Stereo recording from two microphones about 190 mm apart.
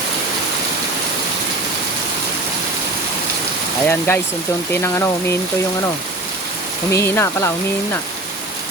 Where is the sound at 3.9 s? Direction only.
10° left (ahead or behind).